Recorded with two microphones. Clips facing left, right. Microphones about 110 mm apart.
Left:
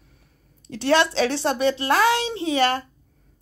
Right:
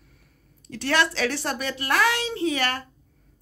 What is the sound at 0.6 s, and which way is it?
A woman's voice, 25° left (ahead or behind).